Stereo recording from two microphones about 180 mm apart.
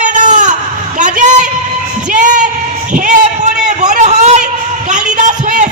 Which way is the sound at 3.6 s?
40° right (ahead or behind).